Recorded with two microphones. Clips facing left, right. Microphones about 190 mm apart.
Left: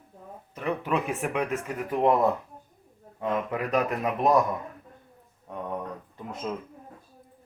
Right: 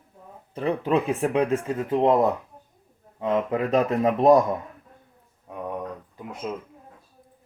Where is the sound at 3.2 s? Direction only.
25° right (ahead or behind).